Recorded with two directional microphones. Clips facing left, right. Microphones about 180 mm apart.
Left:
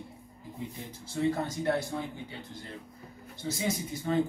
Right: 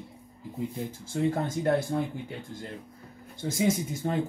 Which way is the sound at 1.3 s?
50° right (ahead or behind).